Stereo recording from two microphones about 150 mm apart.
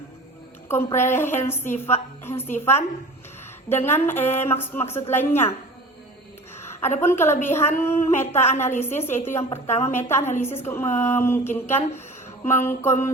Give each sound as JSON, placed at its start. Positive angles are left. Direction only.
{"t": 0.7, "sound": "a woman's voice", "side_deg": 15}
{"t": 6.6, "sound": "a sound", "side_deg": 15}
{"t": 7.0, "sound": "a woman's voice", "side_deg": 15}